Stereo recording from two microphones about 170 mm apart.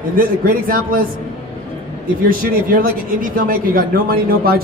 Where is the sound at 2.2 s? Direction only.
55° right (ahead or behind).